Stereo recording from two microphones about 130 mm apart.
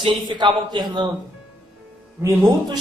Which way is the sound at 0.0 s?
35° right (ahead or behind).